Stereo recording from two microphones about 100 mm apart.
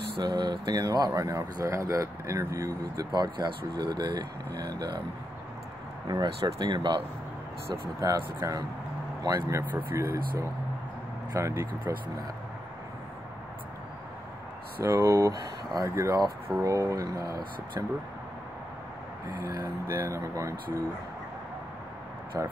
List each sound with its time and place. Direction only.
0.2 s speech: 45° right (ahead or behind)
3.1 s speech: 45° right (ahead or behind)
6.0 s speech: 45° right (ahead or behind)
8.0 s speech: 40° right (ahead or behind)
14.8 s speech: 25° right (ahead or behind)
19.2 s speech: 30° right (ahead or behind)